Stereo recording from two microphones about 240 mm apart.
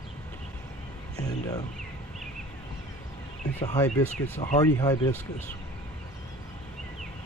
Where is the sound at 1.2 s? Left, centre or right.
Centre.